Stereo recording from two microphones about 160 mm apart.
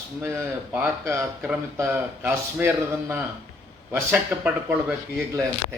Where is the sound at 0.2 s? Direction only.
15° right (ahead or behind).